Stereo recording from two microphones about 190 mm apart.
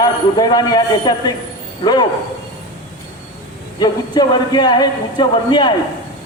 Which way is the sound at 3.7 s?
20° left (ahead or behind).